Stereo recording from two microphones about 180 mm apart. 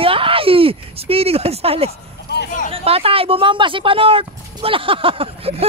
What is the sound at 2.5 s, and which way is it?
Speech, 45° left (ahead or behind).